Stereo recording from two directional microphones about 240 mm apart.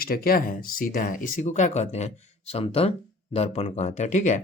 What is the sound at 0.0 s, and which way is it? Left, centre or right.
Speech, left.